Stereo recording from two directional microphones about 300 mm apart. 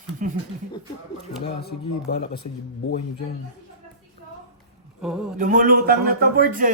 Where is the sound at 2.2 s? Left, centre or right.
Left.